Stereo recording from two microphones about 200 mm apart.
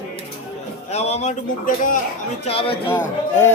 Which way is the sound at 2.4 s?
30° left (ahead or behind).